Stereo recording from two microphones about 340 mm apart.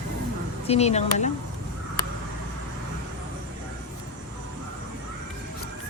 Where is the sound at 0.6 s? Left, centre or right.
Centre.